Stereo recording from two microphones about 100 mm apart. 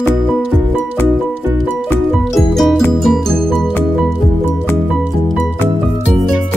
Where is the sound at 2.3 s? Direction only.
Centre (ahead or behind).